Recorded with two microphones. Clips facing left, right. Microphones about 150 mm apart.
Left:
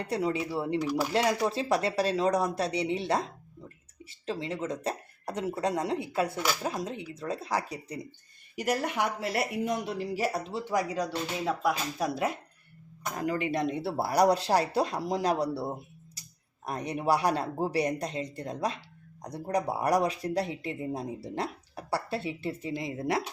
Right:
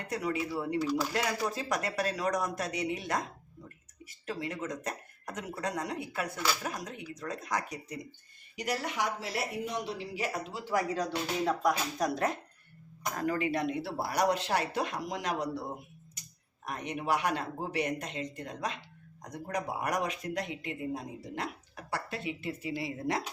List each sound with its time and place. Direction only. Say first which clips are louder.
0.1 s a woman's voice: left 3 dB; 25° left (ahead or behind)
8.5 s speech: left 4 dB; 50° left (ahead or behind)
10.5 s speech: left 2 dB; 20° left (ahead or behind)
13.1 s speech: left 1 dB; 20° left (ahead or behind)
16.6 s speech: left 5 dB; 35° left (ahead or behind)
22.7 s a woman's voice: left 3 dB; 20° left (ahead or behind)